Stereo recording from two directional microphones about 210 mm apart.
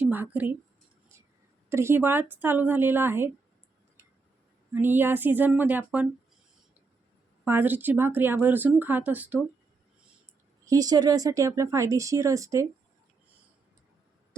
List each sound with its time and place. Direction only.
0.0 s speech: 10° right (ahead or behind)
1.7 s speech: 10° right (ahead or behind)
4.7 s speech: 10° right (ahead or behind)
7.4 s speech: 10° right (ahead or behind)
10.7 s speech: 20° right (ahead or behind)